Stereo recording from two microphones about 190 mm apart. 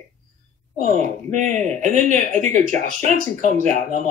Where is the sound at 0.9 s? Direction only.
40° right (ahead or behind).